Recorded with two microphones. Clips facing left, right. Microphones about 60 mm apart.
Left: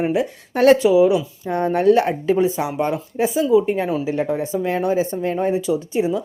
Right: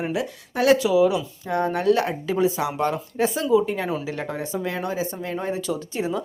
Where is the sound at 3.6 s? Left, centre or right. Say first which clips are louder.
Left 5 dB; left.